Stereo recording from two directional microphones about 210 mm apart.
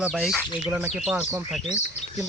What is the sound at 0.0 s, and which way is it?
Speech, centre (ahead or behind).